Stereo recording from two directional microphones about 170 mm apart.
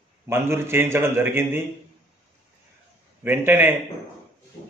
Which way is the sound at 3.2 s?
10° right (ahead or behind).